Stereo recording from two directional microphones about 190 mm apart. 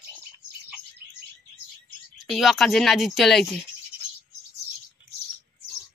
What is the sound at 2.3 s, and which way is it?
Speech, centre (ahead or behind).